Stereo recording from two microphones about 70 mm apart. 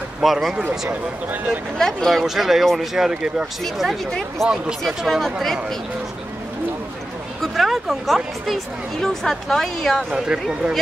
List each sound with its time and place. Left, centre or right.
0.2 s speech: centre
0.7 s speech: right
1.8 s speech: centre
7.5 s speech: centre
10.1 s speech: centre